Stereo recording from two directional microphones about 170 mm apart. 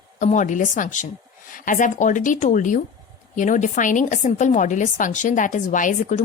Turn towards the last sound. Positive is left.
turn(degrees=45)  # may be behind; listen again after turning